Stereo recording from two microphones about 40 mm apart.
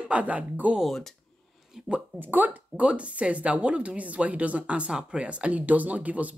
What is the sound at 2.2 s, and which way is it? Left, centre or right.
Speech, right.